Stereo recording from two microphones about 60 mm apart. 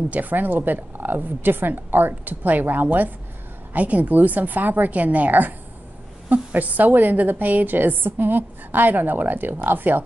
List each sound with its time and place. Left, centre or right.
0.1 s a woman's voice: right